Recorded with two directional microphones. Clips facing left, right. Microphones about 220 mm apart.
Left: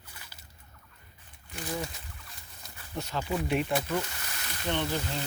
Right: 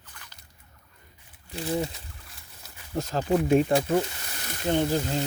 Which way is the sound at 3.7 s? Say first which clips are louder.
Right 7 dB; 30° right (ahead or behind).